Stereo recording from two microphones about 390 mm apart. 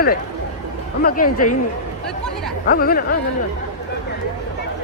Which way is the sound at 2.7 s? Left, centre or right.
Left.